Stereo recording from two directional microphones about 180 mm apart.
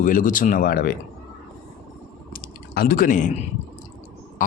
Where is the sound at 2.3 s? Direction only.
55° left (ahead or behind).